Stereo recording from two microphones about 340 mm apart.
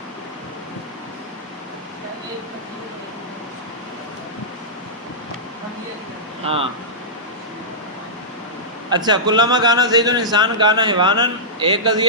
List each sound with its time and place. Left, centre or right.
6.4 s speech: centre
8.9 s a man's voice: centre